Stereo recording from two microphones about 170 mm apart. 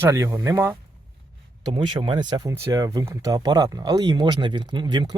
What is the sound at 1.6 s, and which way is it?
Speech, 30° right (ahead or behind).